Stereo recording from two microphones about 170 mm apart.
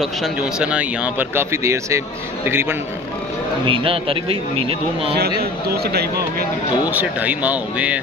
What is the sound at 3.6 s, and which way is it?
Speech, 30° right (ahead or behind).